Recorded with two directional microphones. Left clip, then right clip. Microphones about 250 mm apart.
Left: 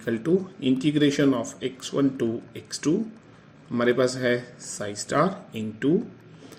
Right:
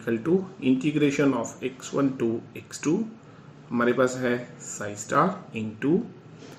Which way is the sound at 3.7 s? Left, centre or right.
Left.